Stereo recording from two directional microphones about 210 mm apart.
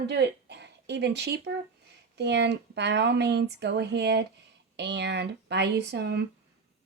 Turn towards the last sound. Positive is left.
turn(degrees=-50)  # may be behind; listen again after turning